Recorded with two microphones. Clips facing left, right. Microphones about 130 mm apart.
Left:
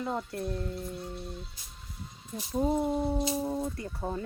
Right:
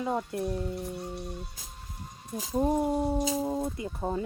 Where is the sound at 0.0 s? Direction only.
15° right (ahead or behind).